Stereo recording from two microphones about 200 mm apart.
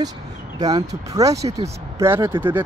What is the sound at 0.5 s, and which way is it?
Speech, 20° right (ahead or behind).